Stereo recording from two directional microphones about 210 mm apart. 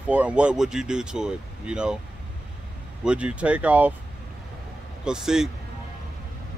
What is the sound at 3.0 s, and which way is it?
Speech, 5° right (ahead or behind).